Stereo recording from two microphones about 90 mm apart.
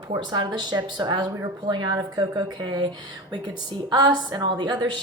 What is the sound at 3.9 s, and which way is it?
A woman's voice, 50° right (ahead or behind).